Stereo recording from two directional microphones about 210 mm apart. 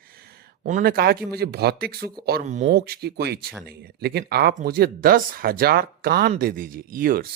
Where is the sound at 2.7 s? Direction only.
50° right (ahead or behind).